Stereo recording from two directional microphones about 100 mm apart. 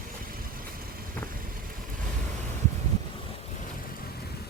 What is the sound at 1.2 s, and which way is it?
Vehicle, 15° left (ahead or behind).